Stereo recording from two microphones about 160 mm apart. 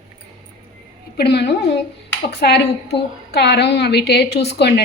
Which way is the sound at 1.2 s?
90° left.